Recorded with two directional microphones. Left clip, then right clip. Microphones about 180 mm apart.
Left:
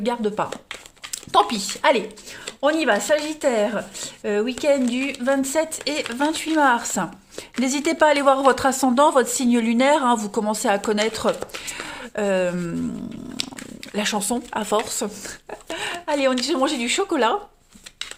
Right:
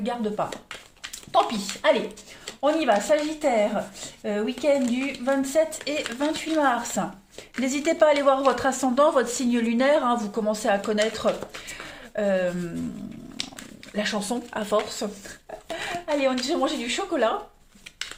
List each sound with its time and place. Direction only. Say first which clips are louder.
0.0 s a woman's voice: left 4 dB; 65° left (ahead or behind)
13.9 s a woman's voice: left 3 dB; 45° left (ahead or behind)